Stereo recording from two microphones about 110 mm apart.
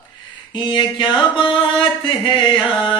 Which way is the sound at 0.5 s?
45° left (ahead or behind).